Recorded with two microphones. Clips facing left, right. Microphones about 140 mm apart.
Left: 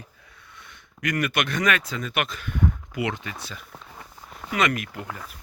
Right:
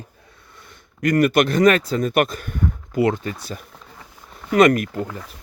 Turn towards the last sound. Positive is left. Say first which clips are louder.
# right 10 dB
turn(degrees=-40)  # may be behind; listen again after turning